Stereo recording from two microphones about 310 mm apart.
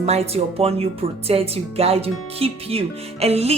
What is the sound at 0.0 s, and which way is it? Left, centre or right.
Speech, centre.